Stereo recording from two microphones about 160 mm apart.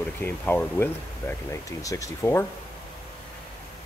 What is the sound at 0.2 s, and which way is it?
Speech, 15° left (ahead or behind).